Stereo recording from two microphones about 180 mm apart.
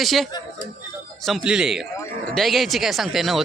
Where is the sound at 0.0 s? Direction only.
Centre (ahead or behind).